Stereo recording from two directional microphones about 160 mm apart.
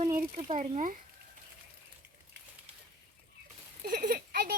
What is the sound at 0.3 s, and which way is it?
Speech, 45° right (ahead or behind).